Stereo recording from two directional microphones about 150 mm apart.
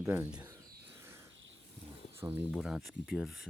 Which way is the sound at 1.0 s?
15° right (ahead or behind).